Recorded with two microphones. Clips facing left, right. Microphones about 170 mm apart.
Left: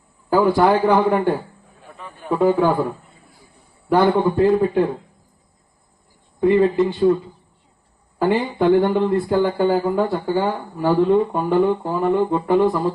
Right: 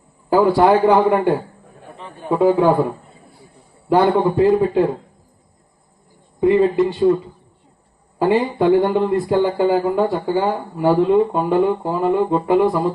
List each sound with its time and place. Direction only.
0.5 s a man's voice: 20° right (ahead or behind)
2.0 s a sound: 25° right (ahead or behind)
2.3 s a man's voice: 15° right (ahead or behind)
3.8 s speech: 20° right (ahead or behind)
6.4 s speech: 20° right (ahead or behind)
8.2 s a man's voice: 20° right (ahead or behind)